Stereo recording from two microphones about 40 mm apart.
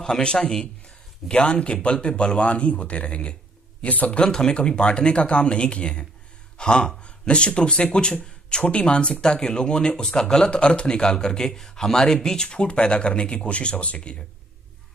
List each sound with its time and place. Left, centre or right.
0.0 s speech: centre; by 4.2 s left
4.2 s speech: centre